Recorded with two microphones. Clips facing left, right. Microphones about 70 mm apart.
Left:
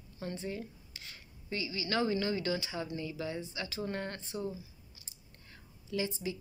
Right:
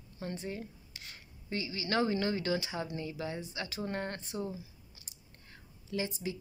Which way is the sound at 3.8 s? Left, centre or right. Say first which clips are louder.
Right 1 dB; right.